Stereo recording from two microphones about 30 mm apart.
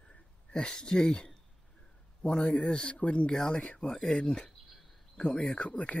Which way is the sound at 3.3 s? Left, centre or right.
Left.